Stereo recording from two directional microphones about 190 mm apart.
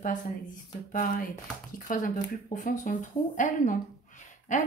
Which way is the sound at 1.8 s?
45° left (ahead or behind).